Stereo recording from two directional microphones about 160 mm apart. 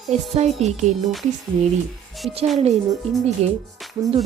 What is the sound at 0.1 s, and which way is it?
Speech, 45° right (ahead or behind).